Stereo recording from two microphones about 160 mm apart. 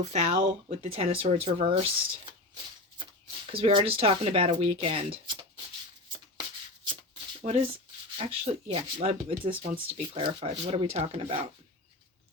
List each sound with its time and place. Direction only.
0.0 s speech: 45° right (ahead or behind)
3.5 s speech: 35° right (ahead or behind)
6.8 s shuffle: 30° right (ahead or behind)
7.4 s speech: 35° right (ahead or behind)